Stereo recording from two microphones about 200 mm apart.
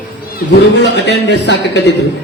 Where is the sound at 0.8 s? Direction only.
60° left (ahead or behind).